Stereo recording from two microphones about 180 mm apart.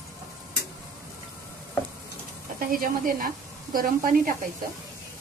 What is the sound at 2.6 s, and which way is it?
A woman's voice, 50° right (ahead or behind).